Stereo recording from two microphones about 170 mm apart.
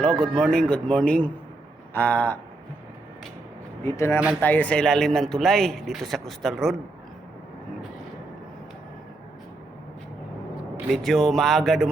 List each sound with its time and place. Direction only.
0.0 s a man's voice: 5° left (ahead or behind)
3.8 s a man's voice: 15° left (ahead or behind)
10.8 s a man's voice: centre (ahead or behind)